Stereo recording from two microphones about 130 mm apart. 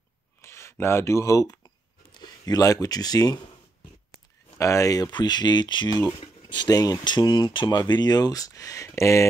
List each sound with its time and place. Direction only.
0.4 s speech: 20° left (ahead or behind)
4.6 s speech: 25° left (ahead or behind)